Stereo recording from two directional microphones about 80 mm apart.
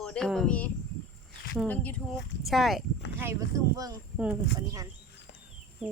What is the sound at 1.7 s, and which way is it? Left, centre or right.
Speech, centre.